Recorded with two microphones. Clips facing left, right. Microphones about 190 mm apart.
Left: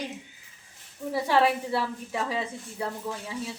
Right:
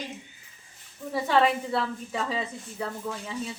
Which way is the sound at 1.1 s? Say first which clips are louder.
Even; 10° left (ahead or behind).